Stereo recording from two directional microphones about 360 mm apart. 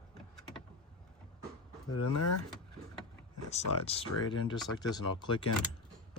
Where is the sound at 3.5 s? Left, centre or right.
Centre.